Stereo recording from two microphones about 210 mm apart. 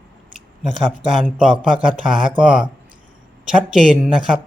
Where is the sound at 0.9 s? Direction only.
Centre (ahead or behind).